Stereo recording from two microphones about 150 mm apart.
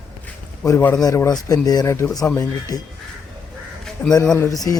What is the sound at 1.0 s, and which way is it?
Speech, 25° left (ahead or behind).